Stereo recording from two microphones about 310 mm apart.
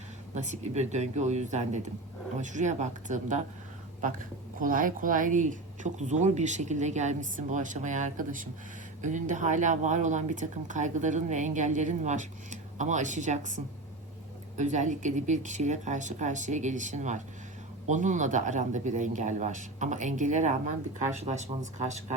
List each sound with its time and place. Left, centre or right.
0.3 s speech: right
4.6 s speech: right